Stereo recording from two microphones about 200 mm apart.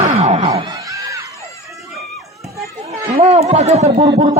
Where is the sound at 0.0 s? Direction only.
35° right (ahead or behind).